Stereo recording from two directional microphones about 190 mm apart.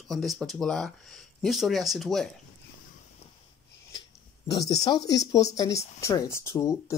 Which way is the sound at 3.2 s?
30° left (ahead or behind).